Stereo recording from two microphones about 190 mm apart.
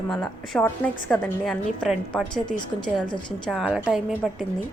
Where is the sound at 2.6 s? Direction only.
25° left (ahead or behind).